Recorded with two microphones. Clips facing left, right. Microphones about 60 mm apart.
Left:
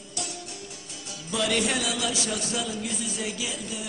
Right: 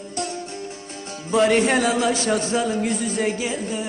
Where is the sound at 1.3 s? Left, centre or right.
Right.